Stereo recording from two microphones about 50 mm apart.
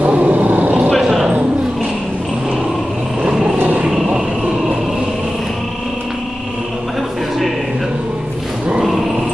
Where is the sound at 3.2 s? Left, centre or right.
Centre.